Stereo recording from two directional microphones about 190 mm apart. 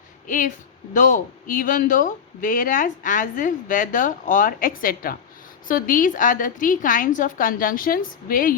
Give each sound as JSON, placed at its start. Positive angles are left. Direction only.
{"t": 0.3, "sound": "a man's voice", "side_deg": 45}